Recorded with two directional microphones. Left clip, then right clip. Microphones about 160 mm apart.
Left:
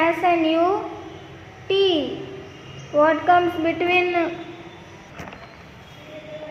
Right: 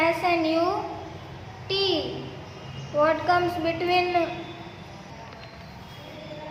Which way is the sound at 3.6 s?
25° left (ahead or behind).